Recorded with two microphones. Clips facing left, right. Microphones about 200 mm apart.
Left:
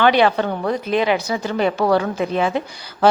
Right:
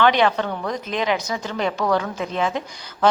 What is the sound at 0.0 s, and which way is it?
A woman's voice, 5° left (ahead or behind).